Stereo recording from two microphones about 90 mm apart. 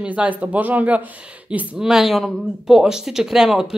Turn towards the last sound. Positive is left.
turn(degrees=-5)  # may be behind; listen again after turning